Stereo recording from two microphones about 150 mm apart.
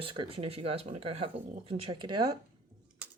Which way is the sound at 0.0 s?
35° right (ahead or behind).